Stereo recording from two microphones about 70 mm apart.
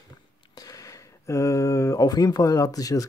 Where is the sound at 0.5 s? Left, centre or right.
Left.